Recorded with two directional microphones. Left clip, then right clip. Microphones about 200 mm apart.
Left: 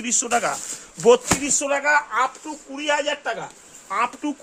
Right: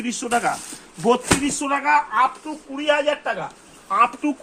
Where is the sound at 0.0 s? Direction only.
55° left (ahead or behind).